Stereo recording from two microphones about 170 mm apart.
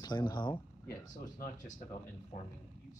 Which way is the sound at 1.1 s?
50° left (ahead or behind).